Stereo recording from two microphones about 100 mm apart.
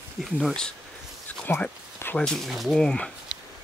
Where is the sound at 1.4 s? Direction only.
20° left (ahead or behind).